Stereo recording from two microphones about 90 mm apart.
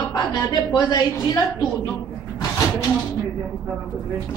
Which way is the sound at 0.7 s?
55° left (ahead or behind).